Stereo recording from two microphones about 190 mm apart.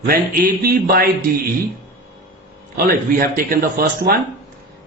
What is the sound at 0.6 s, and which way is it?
Speech, 50° right (ahead or behind).